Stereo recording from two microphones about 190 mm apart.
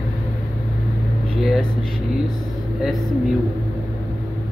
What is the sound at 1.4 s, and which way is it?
Speech, centre (ahead or behind).